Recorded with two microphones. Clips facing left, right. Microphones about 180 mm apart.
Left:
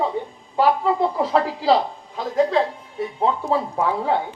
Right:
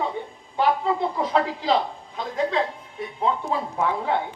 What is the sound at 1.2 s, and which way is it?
Speech, 35° left (ahead or behind).